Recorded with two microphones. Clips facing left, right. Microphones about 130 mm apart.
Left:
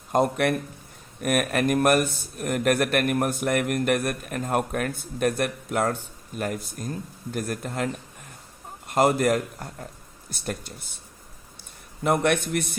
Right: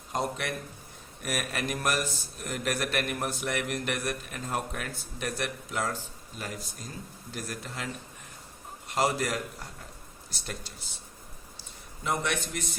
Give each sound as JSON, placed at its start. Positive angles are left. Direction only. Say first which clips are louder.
{"t": 0.1, "sound": "a man's voice", "louder": "left 10 dB", "side_deg": 55}
{"t": 8.9, "sound": "speech", "louder": "left 8 dB", "side_deg": 50}
{"t": 12.0, "sound": "a man's voice", "louder": "left 9 dB", "side_deg": 55}